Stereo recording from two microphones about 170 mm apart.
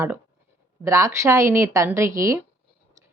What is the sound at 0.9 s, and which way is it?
A woman's voice, 15° right (ahead or behind).